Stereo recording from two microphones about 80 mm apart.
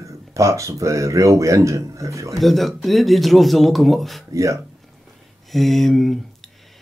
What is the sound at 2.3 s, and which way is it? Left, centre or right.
Speech, centre.